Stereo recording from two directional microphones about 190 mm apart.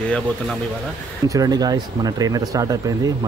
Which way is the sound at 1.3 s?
20° right (ahead or behind).